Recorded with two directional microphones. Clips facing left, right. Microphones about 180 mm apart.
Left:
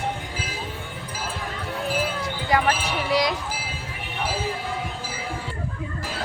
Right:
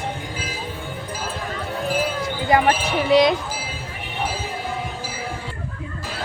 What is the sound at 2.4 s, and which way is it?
Speech, 25° right (ahead or behind).